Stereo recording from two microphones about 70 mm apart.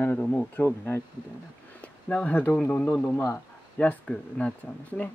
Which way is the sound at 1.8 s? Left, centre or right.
Centre.